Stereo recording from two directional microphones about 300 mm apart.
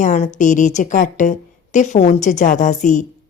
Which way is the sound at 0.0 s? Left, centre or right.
Left.